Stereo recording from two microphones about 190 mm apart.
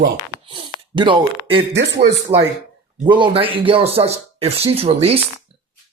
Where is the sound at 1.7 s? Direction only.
65° right (ahead or behind).